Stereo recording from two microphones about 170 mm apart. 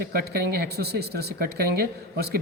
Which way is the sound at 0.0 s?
60° right (ahead or behind).